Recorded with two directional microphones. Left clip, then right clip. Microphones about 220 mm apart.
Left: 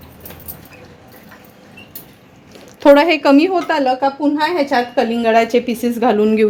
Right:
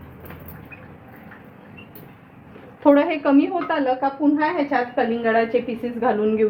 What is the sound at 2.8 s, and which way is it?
A woman's voice, 60° left (ahead or behind).